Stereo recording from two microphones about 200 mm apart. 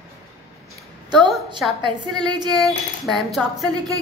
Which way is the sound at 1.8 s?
20° right (ahead or behind).